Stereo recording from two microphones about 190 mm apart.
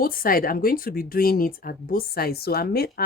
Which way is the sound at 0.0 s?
50° left (ahead or behind).